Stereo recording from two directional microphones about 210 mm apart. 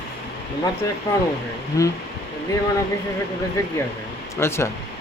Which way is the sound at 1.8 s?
15° left (ahead or behind).